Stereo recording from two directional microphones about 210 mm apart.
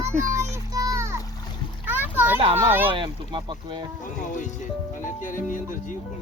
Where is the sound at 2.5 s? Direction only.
10° right (ahead or behind).